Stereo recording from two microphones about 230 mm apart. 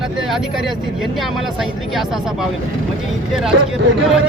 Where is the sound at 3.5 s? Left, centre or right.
Right.